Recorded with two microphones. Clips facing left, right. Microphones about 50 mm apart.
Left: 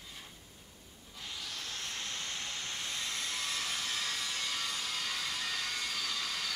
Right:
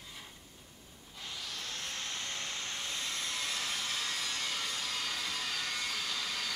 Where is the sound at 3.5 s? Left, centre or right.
Centre.